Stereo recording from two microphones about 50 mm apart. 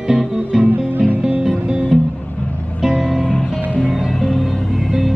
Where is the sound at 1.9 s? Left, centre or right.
Centre.